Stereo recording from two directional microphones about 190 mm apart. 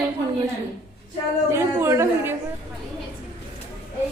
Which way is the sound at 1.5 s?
15° right (ahead or behind).